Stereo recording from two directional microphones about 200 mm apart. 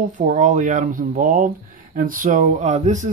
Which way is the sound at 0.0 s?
40° right (ahead or behind).